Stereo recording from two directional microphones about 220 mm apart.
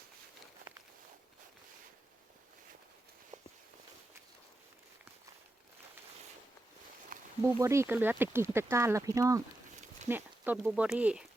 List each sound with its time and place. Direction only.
3.3 s walk: 35° right (ahead or behind)
7.1 s a sound: 40° right (ahead or behind)
7.6 s speech: 10° right (ahead or behind)